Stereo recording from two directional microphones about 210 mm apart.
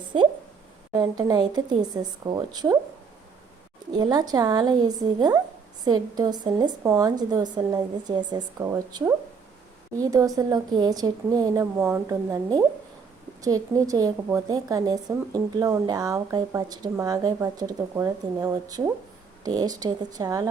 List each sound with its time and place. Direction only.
0.9 s a woman's voice: 20° right (ahead or behind)
3.9 s a woman's voice: 20° right (ahead or behind)